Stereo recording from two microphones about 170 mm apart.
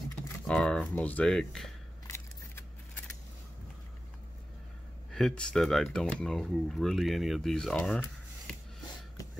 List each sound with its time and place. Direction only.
0.5 s speech: 5° left (ahead or behind)
2.0 s a sound: 15° left (ahead or behind)
5.1 s speech: 5° left (ahead or behind)